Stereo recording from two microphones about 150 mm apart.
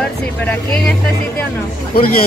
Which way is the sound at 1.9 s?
90° left.